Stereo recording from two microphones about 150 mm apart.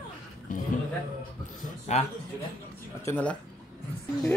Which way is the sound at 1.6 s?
50° left (ahead or behind).